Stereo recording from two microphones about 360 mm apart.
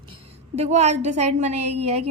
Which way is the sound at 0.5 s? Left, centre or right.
Centre.